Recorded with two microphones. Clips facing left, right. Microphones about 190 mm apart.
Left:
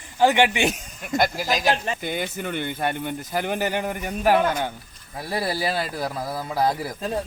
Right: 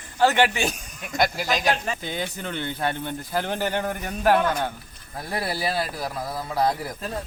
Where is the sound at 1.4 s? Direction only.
5° left (ahead or behind).